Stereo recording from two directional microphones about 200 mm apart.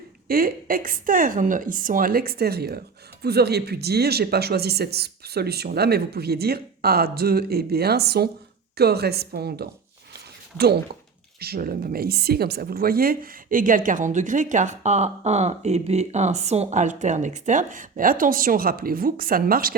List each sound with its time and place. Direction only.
0.3 s speech: 45° right (ahead or behind)
11.3 s speech: 50° right (ahead or behind)